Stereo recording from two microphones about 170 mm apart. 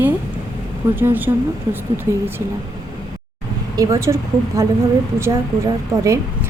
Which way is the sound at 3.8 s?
20° right (ahead or behind).